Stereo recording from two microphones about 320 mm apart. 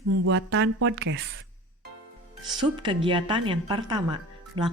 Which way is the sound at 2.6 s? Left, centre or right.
Centre.